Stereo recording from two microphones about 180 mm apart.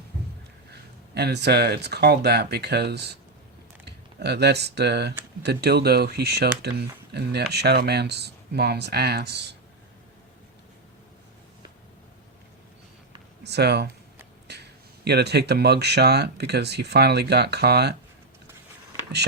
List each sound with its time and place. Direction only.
0.7 s speech: 65° right (ahead or behind)
13.4 s speech: 65° right (ahead or behind)